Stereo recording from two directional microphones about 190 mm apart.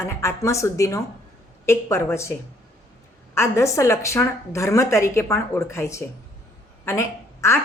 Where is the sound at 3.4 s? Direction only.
15° left (ahead or behind).